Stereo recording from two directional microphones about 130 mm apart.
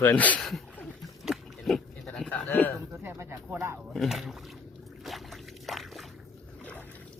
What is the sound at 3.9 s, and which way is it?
Speech, centre (ahead or behind).